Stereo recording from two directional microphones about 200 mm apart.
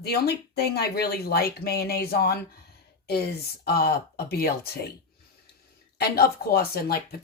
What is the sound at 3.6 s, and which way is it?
Speech, 50° left (ahead or behind).